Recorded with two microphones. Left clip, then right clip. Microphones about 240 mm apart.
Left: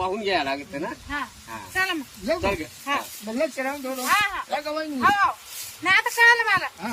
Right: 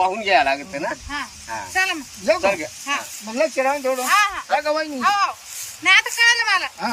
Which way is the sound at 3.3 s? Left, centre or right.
Centre.